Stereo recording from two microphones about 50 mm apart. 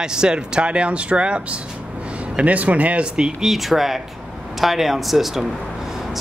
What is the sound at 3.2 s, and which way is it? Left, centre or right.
Speech, centre.